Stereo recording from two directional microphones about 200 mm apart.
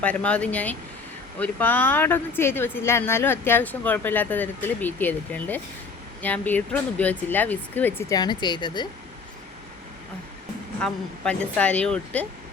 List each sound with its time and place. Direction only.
0.0 s speech: 5° left (ahead or behind)
10.8 s speech: 5° left (ahead or behind)